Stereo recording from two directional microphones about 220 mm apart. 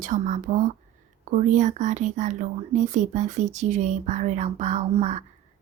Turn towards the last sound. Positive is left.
turn(degrees=-30)  # may be behind; listen again after turning